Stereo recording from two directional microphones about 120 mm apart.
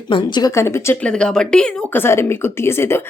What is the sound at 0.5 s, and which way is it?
Speech, 20° left (ahead or behind).